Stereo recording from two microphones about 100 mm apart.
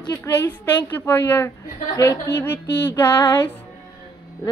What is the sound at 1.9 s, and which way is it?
Music, 35° left (ahead or behind).